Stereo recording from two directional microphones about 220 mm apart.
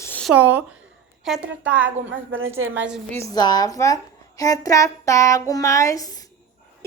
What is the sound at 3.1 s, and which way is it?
A woman's voice, 15° left (ahead or behind).